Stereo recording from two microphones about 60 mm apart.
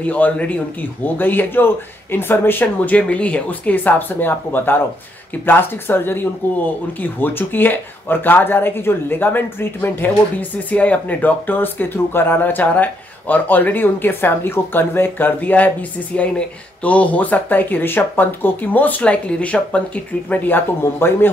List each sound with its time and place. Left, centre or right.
0.0 s speech: left
20.2 s speech: left